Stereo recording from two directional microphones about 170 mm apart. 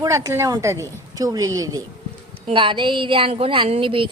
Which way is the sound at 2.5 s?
30° right (ahead or behind).